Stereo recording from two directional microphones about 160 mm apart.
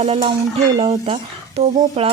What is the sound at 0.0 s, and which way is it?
Speech, 40° right (ahead or behind).